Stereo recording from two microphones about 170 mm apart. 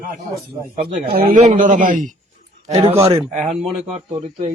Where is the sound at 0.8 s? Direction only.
65° right (ahead or behind).